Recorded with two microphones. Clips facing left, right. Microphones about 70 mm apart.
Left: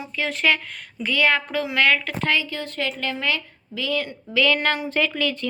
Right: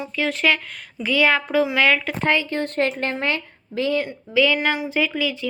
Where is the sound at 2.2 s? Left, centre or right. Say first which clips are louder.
Right 3 dB; right.